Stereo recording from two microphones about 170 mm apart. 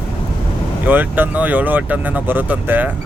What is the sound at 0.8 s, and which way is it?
Speech, 10° right (ahead or behind).